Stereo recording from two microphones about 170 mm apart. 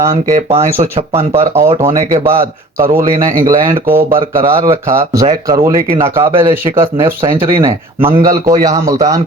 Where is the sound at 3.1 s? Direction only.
55° right (ahead or behind).